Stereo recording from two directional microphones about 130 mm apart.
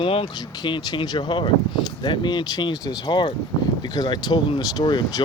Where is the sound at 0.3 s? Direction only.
35° left (ahead or behind).